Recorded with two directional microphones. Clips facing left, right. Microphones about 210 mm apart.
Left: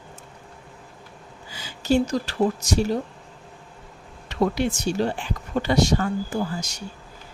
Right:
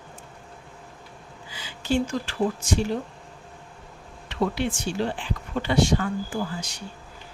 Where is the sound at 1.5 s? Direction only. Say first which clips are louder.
Left 4 dB; 40° left (ahead or behind).